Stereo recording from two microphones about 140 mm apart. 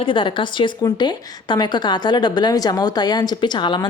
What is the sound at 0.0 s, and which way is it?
A woman's voice, 35° left (ahead or behind).